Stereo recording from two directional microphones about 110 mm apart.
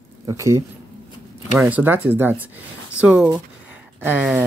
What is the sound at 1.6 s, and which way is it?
Speech, 15° right (ahead or behind).